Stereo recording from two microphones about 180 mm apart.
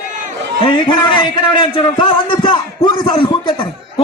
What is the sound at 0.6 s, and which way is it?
A man's voice, 25° left (ahead or behind).